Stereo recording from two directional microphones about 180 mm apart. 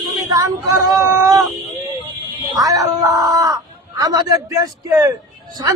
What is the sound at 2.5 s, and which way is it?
Speech, 20° right (ahead or behind).